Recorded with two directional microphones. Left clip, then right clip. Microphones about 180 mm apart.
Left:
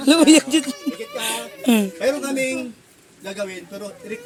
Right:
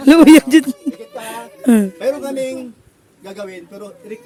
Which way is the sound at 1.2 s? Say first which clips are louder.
Even; 40° right (ahead or behind).